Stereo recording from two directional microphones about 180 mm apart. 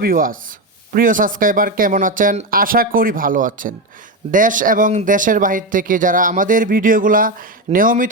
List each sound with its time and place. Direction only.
0.0 s speech: 50° right (ahead or behind)